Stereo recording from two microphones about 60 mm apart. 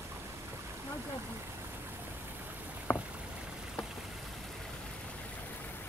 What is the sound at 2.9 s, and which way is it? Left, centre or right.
Rowboat, left.